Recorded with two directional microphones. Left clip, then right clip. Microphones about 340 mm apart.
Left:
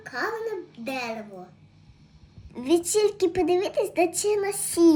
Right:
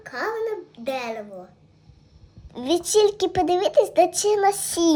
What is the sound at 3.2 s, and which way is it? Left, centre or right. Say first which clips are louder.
A child's voice: right 2 dB; right.